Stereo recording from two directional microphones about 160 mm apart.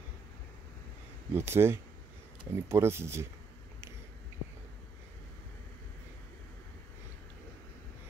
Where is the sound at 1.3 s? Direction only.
15° right (ahead or behind).